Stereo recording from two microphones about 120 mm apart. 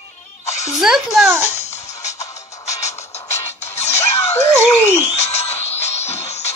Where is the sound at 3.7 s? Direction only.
65° left (ahead or behind).